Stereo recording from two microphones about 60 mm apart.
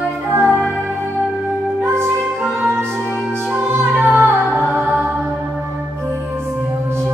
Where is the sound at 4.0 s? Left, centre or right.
Right.